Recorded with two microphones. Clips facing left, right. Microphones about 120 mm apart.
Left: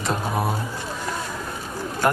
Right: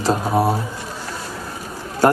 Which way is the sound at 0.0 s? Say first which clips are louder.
Right 7 dB; 30° right (ahead or behind).